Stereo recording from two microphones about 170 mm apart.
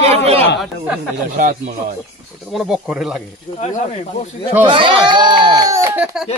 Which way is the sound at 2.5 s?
5° right (ahead or behind).